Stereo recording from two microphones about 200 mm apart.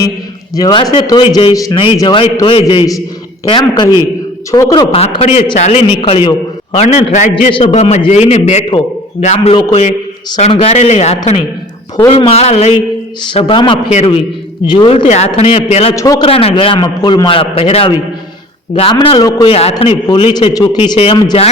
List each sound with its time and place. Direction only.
0.5 s a man's voice: 20° left (ahead or behind)
14.9 s a man's voice: 35° left (ahead or behind)
16.0 s a man's voice: 15° left (ahead or behind)
16.2 s a man's voice: 30° left (ahead or behind)